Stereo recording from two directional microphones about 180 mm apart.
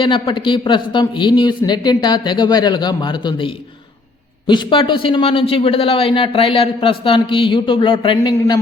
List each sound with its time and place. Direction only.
0.0 s a man's voice: 25° left (ahead or behind)